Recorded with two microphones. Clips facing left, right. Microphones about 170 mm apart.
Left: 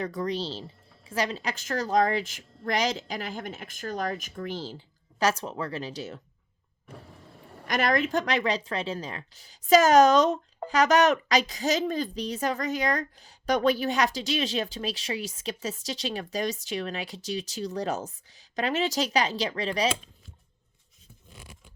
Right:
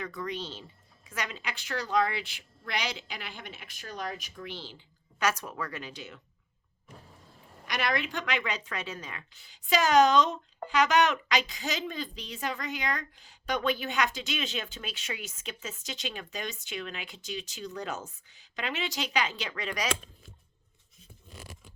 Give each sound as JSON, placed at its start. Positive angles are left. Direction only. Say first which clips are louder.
{"t": 0.0, "sound": "speech", "louder": "left 6 dB", "side_deg": 35}
{"t": 5.2, "sound": "speech", "louder": "left 4 dB", "side_deg": 30}
{"t": 7.7, "sound": "speech", "louder": "left 6 dB", "side_deg": 45}
{"t": 21.3, "sound": "a sound", "louder": "right 2 dB", "side_deg": -45}